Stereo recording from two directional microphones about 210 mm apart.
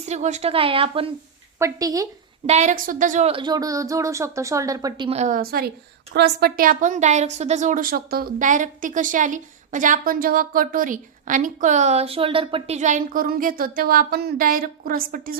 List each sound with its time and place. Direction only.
0.0 s a woman's voice: 35° right (ahead or behind)
1.5 s a woman's voice: 15° right (ahead or behind)
2.5 s a woman's voice: 35° right (ahead or behind)